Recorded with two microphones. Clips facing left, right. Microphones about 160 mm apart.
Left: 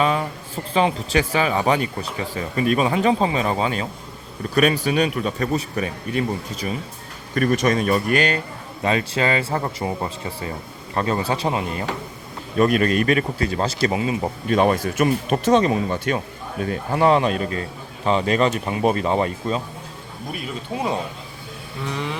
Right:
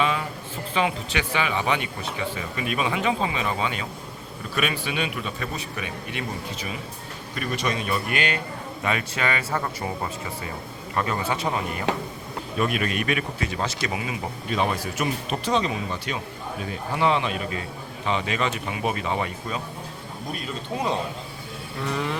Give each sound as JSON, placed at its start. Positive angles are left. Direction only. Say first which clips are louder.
{"t": 0.0, "sound": "speech", "louder": "left 4 dB", "side_deg": 40}
{"t": 12.5, "sound": "speech", "louder": "left 8 dB", "side_deg": 40}
{"t": 14.5, "sound": "speech", "louder": "left 7 dB", "side_deg": 50}
{"t": 21.8, "sound": "a sound", "louder": "even", "side_deg": 0}